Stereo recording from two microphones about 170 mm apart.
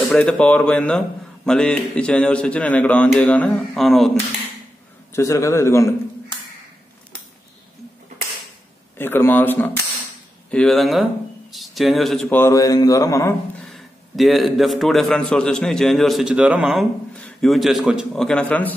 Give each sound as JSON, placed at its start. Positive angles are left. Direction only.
{"t": 0.0, "sound": "a man's voice", "side_deg": 5}
{"t": 5.1, "sound": "a man's voice", "side_deg": 20}
{"t": 8.9, "sound": "a man's voice", "side_deg": 15}
{"t": 12.4, "sound": "speech", "side_deg": 15}
{"t": 13.7, "sound": "a man's voice", "side_deg": 0}